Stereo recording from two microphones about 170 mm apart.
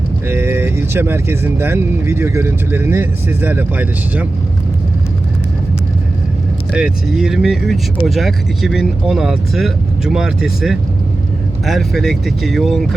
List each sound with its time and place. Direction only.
0.3 s speech: 15° right (ahead or behind)
6.7 s speech: 5° right (ahead or behind)